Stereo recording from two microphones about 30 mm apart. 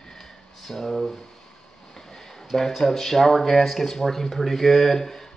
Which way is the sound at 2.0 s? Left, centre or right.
Centre.